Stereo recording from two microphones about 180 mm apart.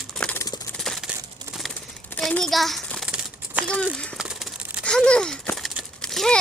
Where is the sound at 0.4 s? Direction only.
20° left (ahead or behind).